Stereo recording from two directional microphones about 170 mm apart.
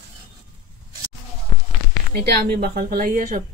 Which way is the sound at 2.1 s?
70° right (ahead or behind).